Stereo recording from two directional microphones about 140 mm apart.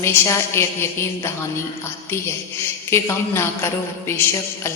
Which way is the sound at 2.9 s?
20° left (ahead or behind).